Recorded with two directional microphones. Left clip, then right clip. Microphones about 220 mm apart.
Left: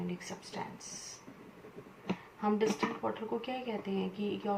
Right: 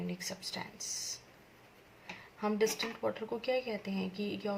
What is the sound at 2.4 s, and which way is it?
Speech, 30° right (ahead or behind).